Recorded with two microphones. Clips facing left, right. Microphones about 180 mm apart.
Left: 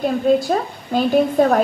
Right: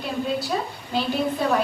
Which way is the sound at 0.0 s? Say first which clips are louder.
Left 10 dB; 50° left (ahead or behind).